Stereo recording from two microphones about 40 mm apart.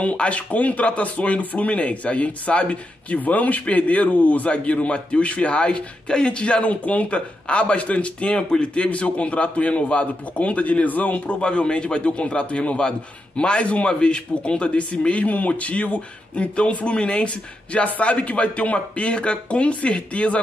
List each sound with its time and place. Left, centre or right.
0.0 s speech: left
11.4 s a man's voice: left